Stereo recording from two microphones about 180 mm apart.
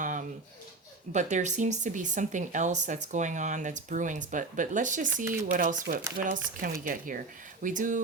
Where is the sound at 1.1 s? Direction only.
40° right (ahead or behind).